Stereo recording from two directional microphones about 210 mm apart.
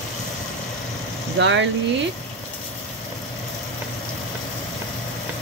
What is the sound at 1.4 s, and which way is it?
Speech, 60° right (ahead or behind).